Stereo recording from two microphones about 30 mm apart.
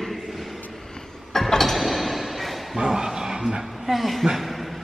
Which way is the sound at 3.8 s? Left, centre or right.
Centre.